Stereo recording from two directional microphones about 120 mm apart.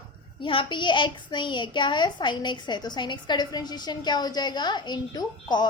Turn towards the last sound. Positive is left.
turn(degrees=40)  # may be behind; listen again after turning